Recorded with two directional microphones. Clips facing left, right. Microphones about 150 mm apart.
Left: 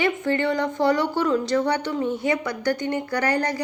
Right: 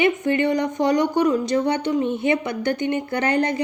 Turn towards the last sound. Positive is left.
turn(degrees=-20)  # may be behind; listen again after turning